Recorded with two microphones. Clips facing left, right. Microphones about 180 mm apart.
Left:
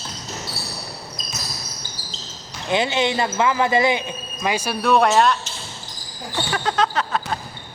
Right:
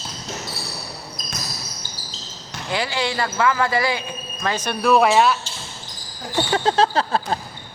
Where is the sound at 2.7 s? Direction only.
20° left (ahead or behind).